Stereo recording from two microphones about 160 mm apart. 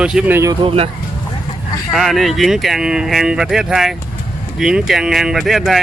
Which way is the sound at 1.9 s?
Centre (ahead or behind).